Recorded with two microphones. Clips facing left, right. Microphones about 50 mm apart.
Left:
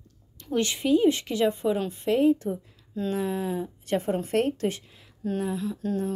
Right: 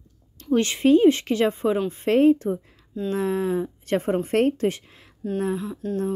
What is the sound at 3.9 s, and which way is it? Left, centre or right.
Speech, right.